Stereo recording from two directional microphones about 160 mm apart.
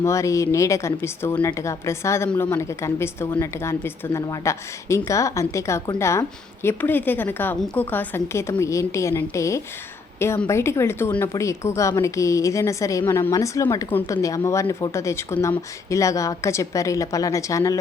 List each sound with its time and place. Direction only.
0.0 s a woman's voice: 20° left (ahead or behind)